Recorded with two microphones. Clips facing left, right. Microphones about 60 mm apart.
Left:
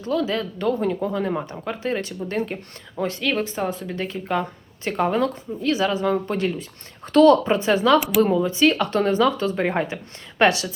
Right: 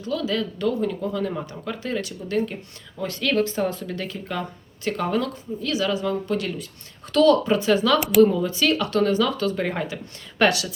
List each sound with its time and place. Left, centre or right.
0.0 s speech: left
3.2 s speech: centre
7.9 s speech: centre
8.4 s speech: left